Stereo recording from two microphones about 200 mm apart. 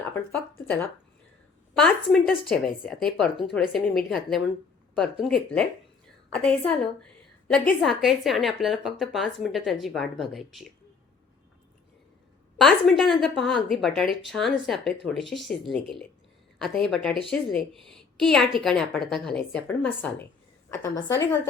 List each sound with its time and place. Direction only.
0.0 s speech: 10° left (ahead or behind)
1.7 s a woman's voice: centre (ahead or behind)
12.5 s a woman's voice: centre (ahead or behind)